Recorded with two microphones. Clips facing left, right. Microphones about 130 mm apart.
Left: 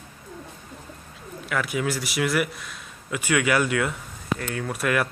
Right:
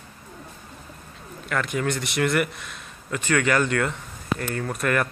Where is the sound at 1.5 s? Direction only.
5° left (ahead or behind).